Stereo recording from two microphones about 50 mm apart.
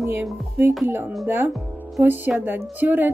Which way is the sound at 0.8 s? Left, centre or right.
Right.